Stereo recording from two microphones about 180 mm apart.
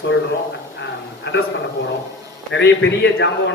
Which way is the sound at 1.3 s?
70° left (ahead or behind).